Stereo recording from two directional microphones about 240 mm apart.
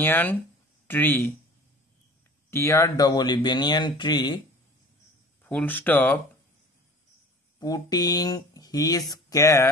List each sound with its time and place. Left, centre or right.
0.0 s speech: centre
2.5 s speech: centre
5.4 s speech: centre
7.5 s speech: centre